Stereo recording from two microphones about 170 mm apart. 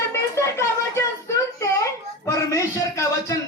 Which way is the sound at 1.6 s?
20° left (ahead or behind).